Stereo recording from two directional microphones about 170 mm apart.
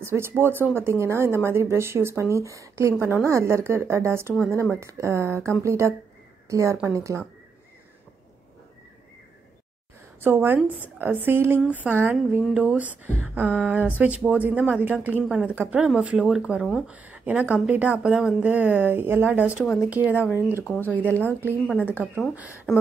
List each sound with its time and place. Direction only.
0.0 s speech: 15° right (ahead or behind)
10.2 s speech: 10° right (ahead or behind)